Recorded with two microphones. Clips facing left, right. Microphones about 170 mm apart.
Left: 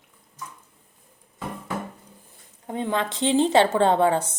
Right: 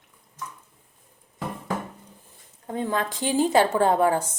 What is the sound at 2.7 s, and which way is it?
A woman's voice, 20° left (ahead or behind).